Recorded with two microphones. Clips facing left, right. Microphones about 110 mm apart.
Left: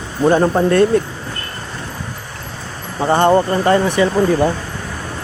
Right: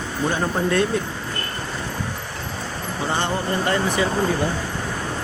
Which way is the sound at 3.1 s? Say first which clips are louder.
Left 12 dB; 50° left (ahead or behind).